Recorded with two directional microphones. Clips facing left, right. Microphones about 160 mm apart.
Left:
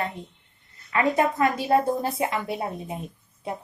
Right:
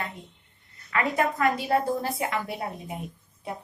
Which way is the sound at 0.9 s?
25° left (ahead or behind).